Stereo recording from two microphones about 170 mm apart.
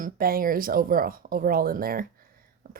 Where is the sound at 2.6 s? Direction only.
65° right (ahead or behind).